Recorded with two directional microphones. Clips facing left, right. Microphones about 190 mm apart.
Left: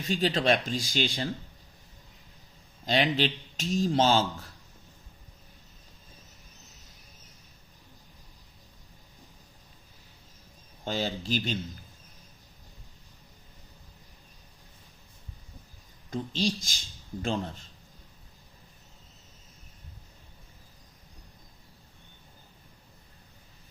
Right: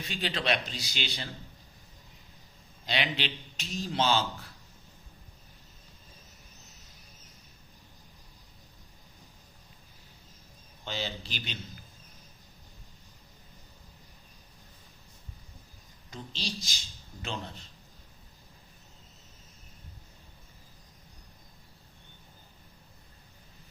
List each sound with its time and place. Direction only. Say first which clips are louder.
0.0 s speech: left 7 dB; 45° left (ahead or behind)
2.8 s speech: left 7 dB; 45° left (ahead or behind)
10.8 s speech: left 6 dB; 45° left (ahead or behind)
16.0 s speech: left 10 dB; 50° left (ahead or behind)